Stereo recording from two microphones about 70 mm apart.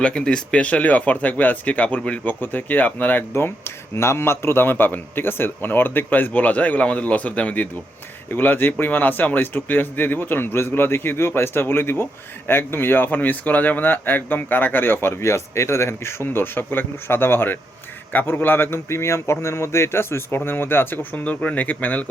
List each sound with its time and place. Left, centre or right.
0.0 s a man's voice: centre